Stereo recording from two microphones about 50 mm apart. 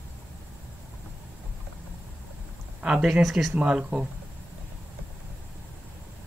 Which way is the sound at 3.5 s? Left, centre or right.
Right.